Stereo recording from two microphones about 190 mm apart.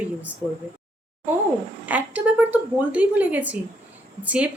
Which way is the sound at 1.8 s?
10° right (ahead or behind).